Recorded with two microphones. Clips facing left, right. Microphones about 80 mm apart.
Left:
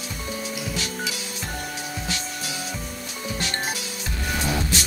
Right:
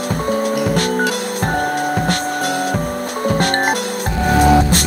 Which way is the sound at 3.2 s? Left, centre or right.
Right.